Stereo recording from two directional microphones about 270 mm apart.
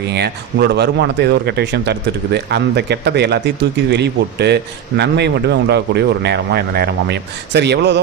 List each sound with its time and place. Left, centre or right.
0.0 s a man's voice: right